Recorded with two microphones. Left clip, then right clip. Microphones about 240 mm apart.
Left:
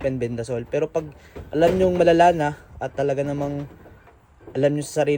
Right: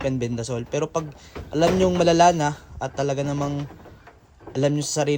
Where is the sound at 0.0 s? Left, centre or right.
Centre.